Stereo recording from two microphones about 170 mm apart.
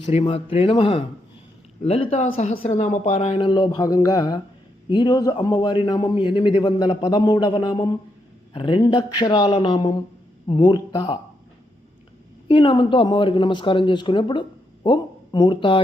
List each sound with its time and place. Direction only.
0.0 s a man's voice: 35° left (ahead or behind)
12.5 s a man's voice: 30° left (ahead or behind)